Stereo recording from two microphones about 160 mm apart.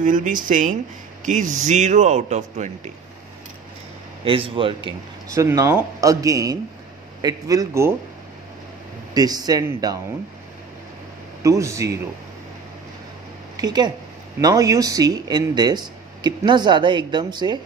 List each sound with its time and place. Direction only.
0.0 s a man's voice: 55° right (ahead or behind)
4.2 s a man's voice: 35° right (ahead or behind)
5.3 s speech: 20° right (ahead or behind)
9.1 s speech: 25° right (ahead or behind)
11.4 s speech: 20° right (ahead or behind)
13.6 s speech: 25° right (ahead or behind)